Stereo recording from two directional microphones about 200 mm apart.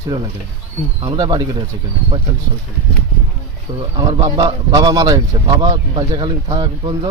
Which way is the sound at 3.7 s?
20° right (ahead or behind).